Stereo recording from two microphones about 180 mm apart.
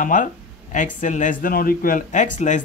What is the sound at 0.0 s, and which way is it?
Speech, 45° left (ahead or behind).